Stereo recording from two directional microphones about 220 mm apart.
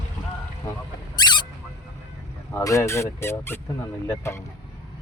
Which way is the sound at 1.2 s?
20° left (ahead or behind).